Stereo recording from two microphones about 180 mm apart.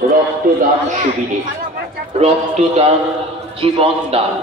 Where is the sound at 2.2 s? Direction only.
35° right (ahead or behind).